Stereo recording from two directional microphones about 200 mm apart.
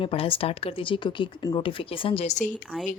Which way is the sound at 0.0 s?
25° left (ahead or behind).